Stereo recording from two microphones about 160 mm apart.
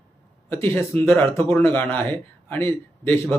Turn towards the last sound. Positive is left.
turn(degrees=15)  # may be behind; listen again after turning